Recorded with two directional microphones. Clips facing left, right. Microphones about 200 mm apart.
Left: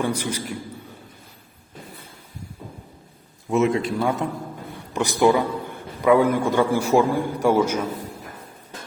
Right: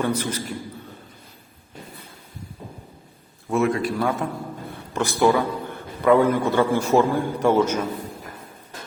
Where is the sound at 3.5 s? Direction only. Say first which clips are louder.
Left 1 dB; 20° left (ahead or behind).